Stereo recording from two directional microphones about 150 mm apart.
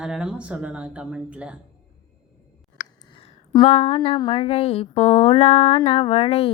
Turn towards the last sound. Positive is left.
turn(degrees=40)  # may be behind; listen again after turning